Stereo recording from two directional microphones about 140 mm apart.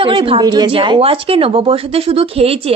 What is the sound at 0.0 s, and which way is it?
A woman's voice, 35° right (ahead or behind).